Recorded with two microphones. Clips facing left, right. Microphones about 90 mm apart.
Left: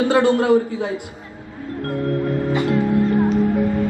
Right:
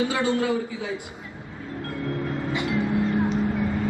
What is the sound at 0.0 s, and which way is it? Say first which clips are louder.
Speech: left 7 dB; 50° left (ahead or behind).